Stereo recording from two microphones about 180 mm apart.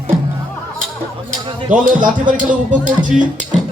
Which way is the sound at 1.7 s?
45° right (ahead or behind).